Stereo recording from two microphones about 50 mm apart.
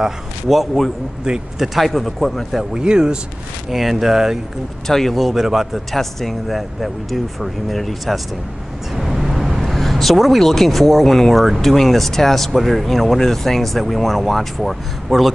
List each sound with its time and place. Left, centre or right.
0.0 s speech: centre
1.2 s speech: centre
1.8 s speech: centre
2.7 s speech: centre
3.7 s speech: centre
4.8 s speech: centre